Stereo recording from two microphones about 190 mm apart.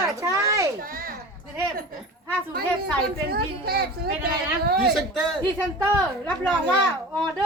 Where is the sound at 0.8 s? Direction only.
50° right (ahead or behind).